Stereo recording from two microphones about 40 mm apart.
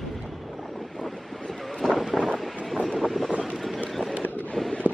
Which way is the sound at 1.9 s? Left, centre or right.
Centre.